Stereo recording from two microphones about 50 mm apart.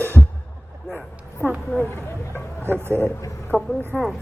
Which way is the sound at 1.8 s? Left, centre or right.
Left.